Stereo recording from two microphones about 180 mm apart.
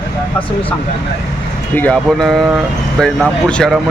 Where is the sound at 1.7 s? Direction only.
5° left (ahead or behind).